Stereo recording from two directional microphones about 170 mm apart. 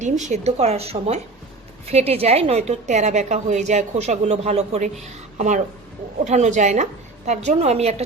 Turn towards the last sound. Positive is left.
turn(degrees=-40)  # may be behind; listen again after turning